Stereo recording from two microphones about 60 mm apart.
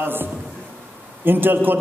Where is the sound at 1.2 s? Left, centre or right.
Right.